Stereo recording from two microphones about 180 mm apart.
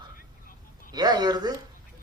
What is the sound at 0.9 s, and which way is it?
Speech, 20° right (ahead or behind).